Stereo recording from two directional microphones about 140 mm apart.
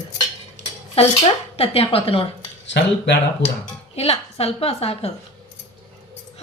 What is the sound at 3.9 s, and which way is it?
A woman's voice, 45° left (ahead or behind).